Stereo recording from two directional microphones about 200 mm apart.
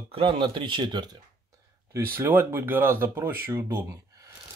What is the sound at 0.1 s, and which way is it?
Speech, 25° right (ahead or behind).